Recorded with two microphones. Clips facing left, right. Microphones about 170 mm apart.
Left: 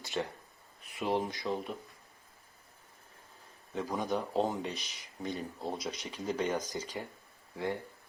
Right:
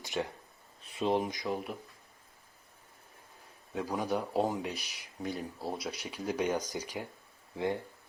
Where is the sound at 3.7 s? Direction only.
10° right (ahead or behind).